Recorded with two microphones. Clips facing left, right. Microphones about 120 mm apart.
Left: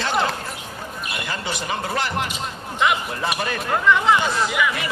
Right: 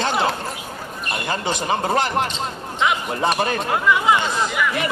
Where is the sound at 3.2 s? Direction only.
35° right (ahead or behind).